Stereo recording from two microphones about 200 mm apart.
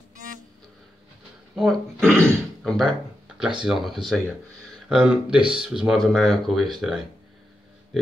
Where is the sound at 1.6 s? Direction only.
Centre (ahead or behind).